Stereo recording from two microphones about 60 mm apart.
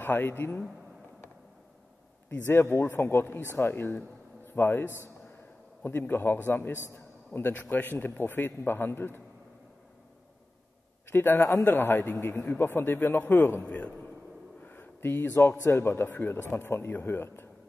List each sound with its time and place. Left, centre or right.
0.0 s speech: left
2.2 s speech: left
11.1 s a man's voice: left
11.4 s a man's voice: left
11.7 s speech: left
13.7 s a man's voice: left
14.6 s a sound: left
15.7 s speech: left